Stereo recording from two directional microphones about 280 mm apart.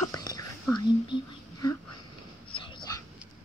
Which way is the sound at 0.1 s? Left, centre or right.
Centre.